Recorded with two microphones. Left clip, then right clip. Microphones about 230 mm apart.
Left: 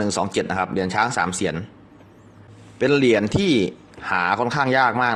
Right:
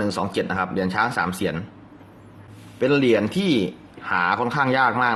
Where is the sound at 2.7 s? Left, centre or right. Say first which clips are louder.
Left 1 dB; left.